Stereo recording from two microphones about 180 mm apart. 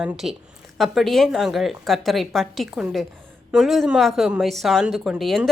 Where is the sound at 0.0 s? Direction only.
5° right (ahead or behind).